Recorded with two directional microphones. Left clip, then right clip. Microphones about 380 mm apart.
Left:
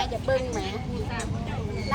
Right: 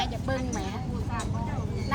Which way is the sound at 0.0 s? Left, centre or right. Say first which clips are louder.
Left 5 dB; centre.